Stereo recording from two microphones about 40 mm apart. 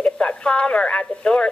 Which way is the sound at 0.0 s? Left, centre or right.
Left.